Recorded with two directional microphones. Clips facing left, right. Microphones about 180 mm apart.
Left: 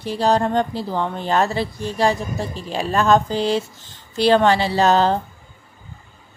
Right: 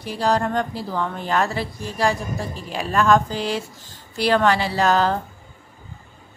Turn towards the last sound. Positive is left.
turn(degrees=25)  # may be behind; listen again after turning